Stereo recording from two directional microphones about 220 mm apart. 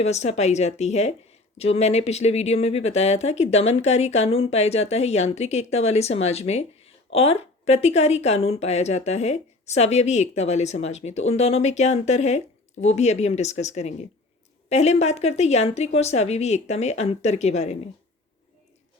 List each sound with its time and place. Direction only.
0.0 s speech: 30° left (ahead or behind)